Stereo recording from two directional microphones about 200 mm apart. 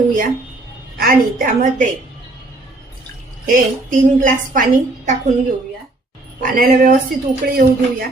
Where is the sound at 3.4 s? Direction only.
45° right (ahead or behind).